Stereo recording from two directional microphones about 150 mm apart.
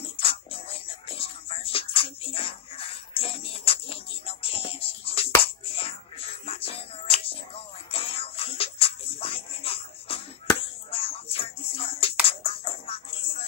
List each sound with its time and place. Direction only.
0.0 s music: 40° left (ahead or behind)
5.8 s hands: 40° left (ahead or behind)
10.9 s music: 40° left (ahead or behind)